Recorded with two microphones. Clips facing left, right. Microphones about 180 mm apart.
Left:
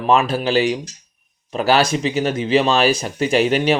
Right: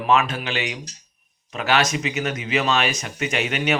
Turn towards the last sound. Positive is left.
turn(degrees=35)  # may be behind; listen again after turning